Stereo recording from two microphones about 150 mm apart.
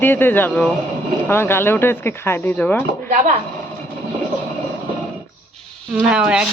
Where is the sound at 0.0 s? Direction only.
15° left (ahead or behind).